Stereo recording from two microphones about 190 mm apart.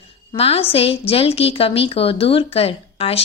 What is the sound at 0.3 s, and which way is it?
A woman's voice, 30° left (ahead or behind).